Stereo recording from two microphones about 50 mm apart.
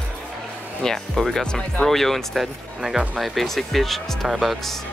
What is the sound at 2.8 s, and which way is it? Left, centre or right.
Speech, centre.